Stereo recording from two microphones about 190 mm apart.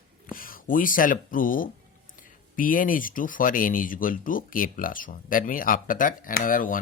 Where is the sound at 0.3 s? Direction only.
45° left (ahead or behind).